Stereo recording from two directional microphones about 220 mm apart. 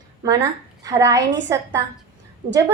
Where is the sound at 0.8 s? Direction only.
15° right (ahead or behind).